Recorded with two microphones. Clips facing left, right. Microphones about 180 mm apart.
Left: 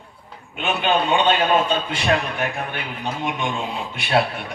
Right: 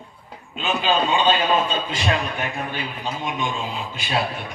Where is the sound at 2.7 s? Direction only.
65° left (ahead or behind).